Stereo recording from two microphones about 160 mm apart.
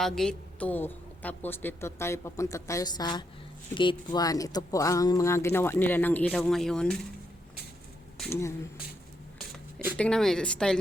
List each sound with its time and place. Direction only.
0.0 s a woman's voice: 5° left (ahead or behind)
8.3 s a woman's voice: 20° left (ahead or behind)
10.0 s speech: 5° left (ahead or behind)